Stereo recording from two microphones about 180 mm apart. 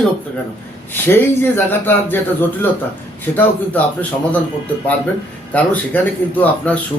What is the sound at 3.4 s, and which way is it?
Speech, 10° left (ahead or behind).